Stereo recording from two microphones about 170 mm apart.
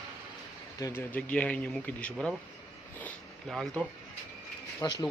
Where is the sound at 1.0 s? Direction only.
10° left (ahead or behind).